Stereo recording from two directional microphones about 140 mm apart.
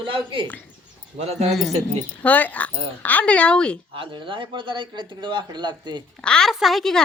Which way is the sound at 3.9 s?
35° right (ahead or behind).